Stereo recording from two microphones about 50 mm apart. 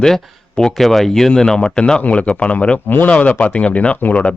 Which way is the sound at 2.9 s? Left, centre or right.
Left.